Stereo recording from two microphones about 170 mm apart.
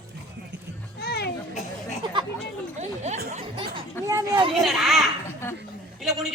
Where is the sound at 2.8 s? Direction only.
45° right (ahead or behind).